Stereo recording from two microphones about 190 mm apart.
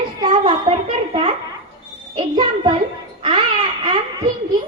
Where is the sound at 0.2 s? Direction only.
25° right (ahead or behind).